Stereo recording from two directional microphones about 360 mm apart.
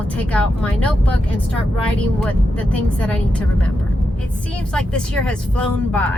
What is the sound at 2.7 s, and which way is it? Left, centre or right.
Speech, centre.